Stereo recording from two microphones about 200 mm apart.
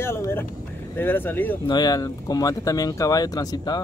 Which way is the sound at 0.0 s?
10° left (ahead or behind).